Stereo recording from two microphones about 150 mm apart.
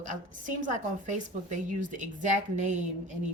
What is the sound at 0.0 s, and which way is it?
A woman's voice, 60° right (ahead or behind).